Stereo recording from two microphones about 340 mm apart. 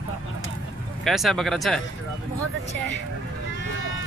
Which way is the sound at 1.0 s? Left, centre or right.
Centre.